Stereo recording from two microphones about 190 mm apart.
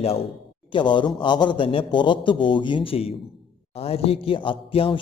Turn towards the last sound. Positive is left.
turn(degrees=30)  # may be behind; listen again after turning